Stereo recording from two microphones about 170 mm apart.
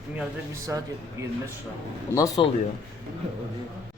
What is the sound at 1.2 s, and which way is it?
Speech, 15° right (ahead or behind).